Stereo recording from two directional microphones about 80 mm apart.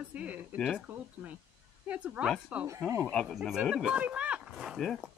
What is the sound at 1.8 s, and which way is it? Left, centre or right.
Speech, centre.